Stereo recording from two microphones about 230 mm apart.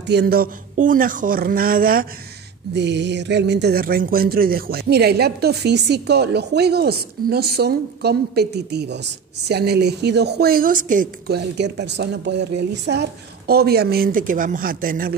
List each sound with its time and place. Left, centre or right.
0.0 s speech: right
2.7 s speech: right